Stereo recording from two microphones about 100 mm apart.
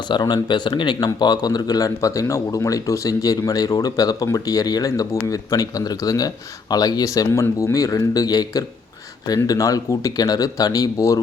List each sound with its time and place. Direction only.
0.1 s a man's voice: 50° left (ahead or behind)